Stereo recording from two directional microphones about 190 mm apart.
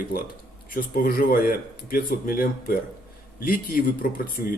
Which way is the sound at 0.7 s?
50° left (ahead or behind).